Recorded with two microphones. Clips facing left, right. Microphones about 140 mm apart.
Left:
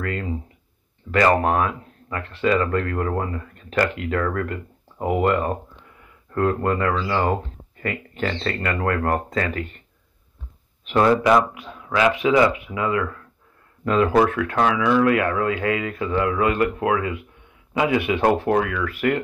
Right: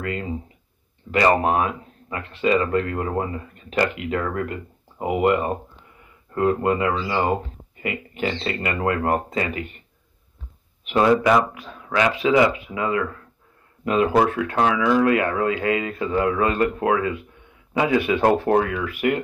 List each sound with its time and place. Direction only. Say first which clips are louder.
0.0 s speech: even; 20° right (ahead or behind)
11.5 s speech: even; 35° right (ahead or behind)
13.8 s speech: left 1 dB; 20° right (ahead or behind); by 18.8 s 40° right (ahead or behind)
18.9 s speech: even; 20° right (ahead or behind)